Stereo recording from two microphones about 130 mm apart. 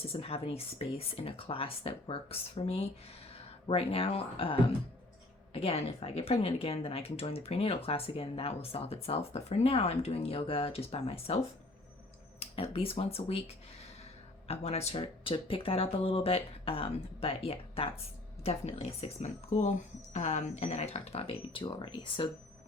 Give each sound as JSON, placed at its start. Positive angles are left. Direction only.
{"t": 0.1, "sound": "speech", "side_deg": 50}
{"t": 5.5, "sound": "speech", "side_deg": 45}
{"t": 12.4, "sound": "speech", "side_deg": 45}
{"t": 14.4, "sound": "speech", "side_deg": 50}